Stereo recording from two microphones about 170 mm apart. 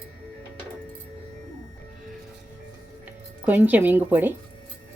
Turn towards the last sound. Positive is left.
turn(degrees=-10)  # may be behind; listen again after turning